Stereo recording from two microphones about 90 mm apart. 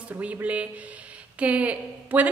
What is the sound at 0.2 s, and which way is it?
A woman's voice, 15° right (ahead or behind).